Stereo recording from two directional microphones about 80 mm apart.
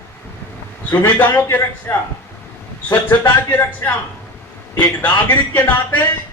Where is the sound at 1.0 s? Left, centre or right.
Left.